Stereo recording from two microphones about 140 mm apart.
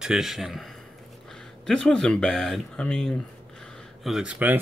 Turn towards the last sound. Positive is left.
turn(degrees=-10)  # may be behind; listen again after turning